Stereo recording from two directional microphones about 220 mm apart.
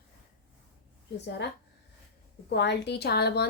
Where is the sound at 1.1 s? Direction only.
50° left (ahead or behind).